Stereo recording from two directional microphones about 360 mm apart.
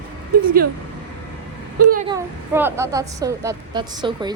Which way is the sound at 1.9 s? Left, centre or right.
Centre.